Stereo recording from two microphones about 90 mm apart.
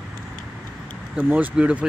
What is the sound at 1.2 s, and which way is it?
Speech, 20° right (ahead or behind).